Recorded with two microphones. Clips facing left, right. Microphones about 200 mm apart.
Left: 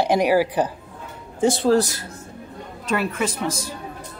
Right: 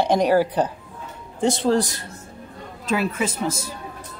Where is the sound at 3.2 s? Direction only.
25° right (ahead or behind).